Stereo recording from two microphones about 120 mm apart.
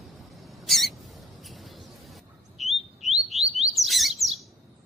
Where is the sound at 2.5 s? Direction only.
70° right (ahead or behind).